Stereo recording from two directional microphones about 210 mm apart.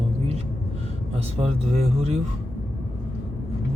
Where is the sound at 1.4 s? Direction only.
30° right (ahead or behind).